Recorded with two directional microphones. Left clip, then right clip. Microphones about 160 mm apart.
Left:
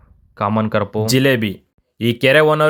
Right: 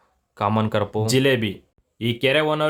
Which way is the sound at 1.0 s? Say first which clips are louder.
Left 3 dB; 25° left (ahead or behind).